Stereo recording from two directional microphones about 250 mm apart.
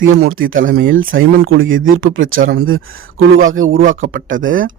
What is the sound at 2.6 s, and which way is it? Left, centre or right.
Speech, right.